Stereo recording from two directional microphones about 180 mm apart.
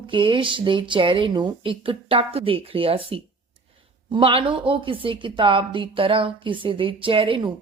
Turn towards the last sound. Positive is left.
turn(degrees=-30)  # may be behind; listen again after turning